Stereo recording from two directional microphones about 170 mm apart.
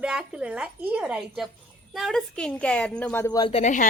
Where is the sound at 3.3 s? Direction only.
25° left (ahead or behind).